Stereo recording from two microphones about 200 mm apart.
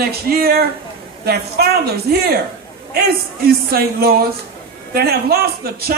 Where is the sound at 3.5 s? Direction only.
50° right (ahead or behind).